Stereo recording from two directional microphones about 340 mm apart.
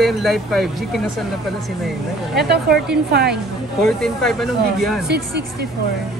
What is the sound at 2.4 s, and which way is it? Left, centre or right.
Speech, right.